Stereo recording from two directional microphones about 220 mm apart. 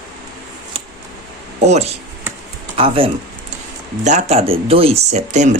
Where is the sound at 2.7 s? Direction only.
25° right (ahead or behind).